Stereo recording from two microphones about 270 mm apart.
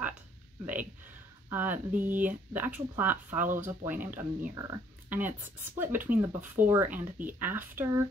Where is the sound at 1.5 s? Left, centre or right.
Centre.